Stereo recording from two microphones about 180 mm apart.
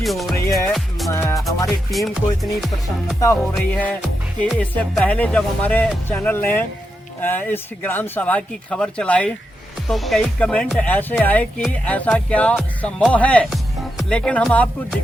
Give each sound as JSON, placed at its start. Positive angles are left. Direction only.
{"t": 0.0, "sound": "speech", "side_deg": 0}
{"t": 0.7, "sound": "music", "side_deg": 0}
{"t": 1.1, "sound": "music", "side_deg": 15}
{"t": 1.6, "sound": "speech", "side_deg": 0}